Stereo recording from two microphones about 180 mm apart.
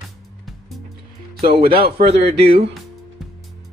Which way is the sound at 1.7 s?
60° right (ahead or behind).